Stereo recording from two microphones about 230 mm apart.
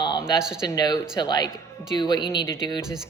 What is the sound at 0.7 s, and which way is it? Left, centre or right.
Speech, centre.